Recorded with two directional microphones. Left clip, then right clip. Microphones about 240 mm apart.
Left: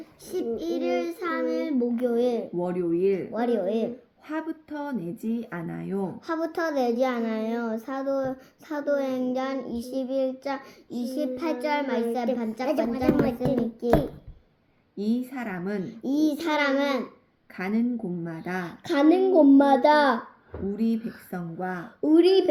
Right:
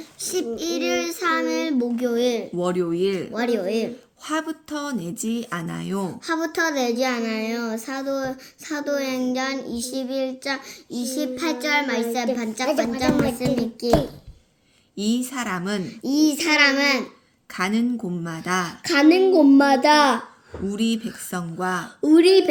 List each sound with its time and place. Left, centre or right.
0.3 s a child's voice: centre
2.6 s speech: right
3.3 s a child's voice: right
4.3 s speech: right
6.2 s a child's voice: right
13.1 s music: centre
14.9 s speech: right
16.6 s a child's voice: centre
17.5 s speech: right
18.9 s a child's voice: centre
20.7 s speech: right
22.0 s a child's voice: centre